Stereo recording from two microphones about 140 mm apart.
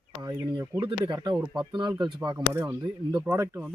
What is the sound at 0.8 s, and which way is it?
Speech, 35° right (ahead or behind).